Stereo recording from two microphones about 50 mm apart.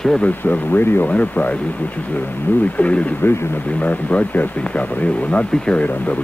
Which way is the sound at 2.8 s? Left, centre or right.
Left.